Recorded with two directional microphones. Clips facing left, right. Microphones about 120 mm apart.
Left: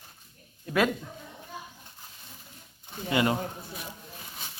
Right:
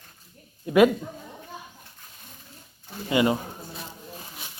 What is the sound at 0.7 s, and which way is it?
Speech, 15° right (ahead or behind).